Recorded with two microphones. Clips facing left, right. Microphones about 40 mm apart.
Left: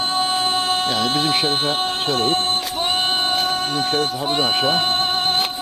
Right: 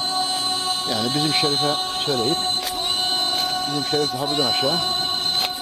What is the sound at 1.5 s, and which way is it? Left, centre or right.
Speech, left.